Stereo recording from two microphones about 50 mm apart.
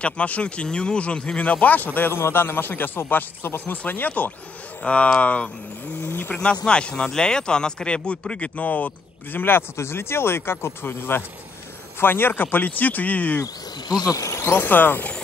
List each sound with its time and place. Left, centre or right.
0.0 s speech: left
2.0 s a man's voice: left
5.9 s a man's voice: left
6.3 s speech: centre
14.4 s a man's voice: left